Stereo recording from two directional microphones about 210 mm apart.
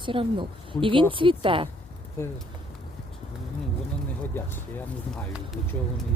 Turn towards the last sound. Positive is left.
turn(degrees=0)  # may be behind; listen again after turning